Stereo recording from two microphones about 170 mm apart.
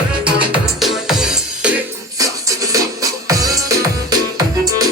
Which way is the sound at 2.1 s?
20° right (ahead or behind).